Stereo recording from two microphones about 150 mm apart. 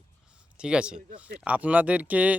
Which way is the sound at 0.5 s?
5° right (ahead or behind).